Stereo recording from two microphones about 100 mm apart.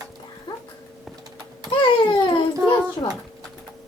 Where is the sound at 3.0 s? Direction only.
50° left (ahead or behind).